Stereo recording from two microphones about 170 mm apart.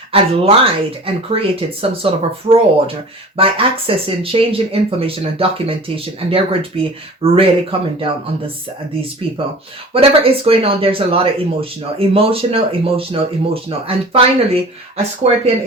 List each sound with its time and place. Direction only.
0.1 s speech: 35° right (ahead or behind)
9.9 s speech: 35° right (ahead or behind)